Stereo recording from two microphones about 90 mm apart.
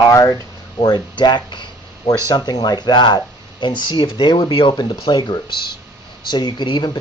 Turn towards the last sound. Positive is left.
turn(degrees=55)  # may be behind; listen again after turning